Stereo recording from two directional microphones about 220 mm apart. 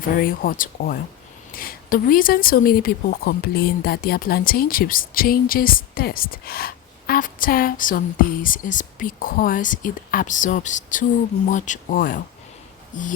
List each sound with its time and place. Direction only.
0.2 s a woman's voice: 40° left (ahead or behind)